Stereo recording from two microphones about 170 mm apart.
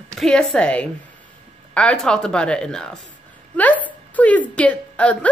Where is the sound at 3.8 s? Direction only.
10° left (ahead or behind).